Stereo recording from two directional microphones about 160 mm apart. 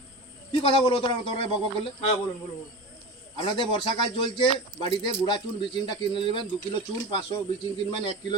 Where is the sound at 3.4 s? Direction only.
30° left (ahead or behind).